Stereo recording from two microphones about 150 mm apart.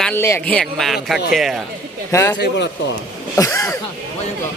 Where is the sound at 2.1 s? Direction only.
20° left (ahead or behind).